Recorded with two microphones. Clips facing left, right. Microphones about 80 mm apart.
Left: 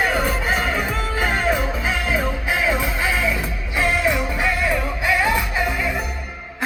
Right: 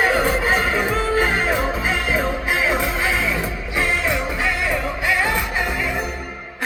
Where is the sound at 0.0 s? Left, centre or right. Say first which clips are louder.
Right 3 dB; right.